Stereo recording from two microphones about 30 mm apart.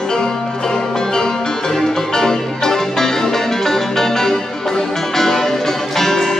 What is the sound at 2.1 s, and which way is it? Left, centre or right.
Music, centre.